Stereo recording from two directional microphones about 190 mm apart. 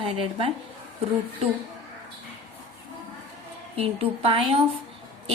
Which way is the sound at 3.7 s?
30° right (ahead or behind).